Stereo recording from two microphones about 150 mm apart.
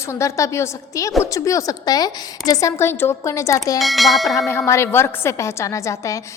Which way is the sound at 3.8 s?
Centre (ahead or behind).